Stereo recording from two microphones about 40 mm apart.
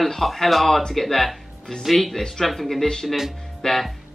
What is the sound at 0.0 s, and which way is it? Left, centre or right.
Speech, centre.